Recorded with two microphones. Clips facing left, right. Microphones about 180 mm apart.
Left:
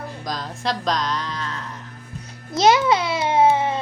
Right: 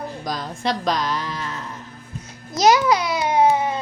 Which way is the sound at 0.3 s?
Centre (ahead or behind).